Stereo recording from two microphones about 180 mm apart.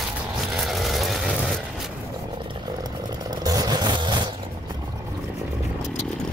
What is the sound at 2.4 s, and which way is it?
Vehicle, 25° right (ahead or behind).